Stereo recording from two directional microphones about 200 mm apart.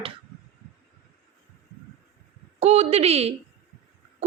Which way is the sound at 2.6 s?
30° right (ahead or behind).